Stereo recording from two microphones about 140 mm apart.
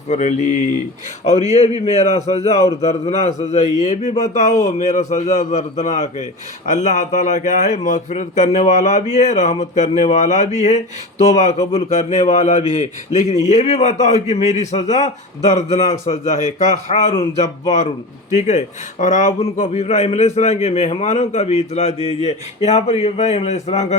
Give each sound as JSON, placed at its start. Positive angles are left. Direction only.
{"t": 0.1, "sound": "a man's voice", "side_deg": 55}